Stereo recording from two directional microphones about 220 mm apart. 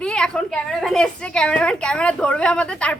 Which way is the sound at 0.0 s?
5° left (ahead or behind).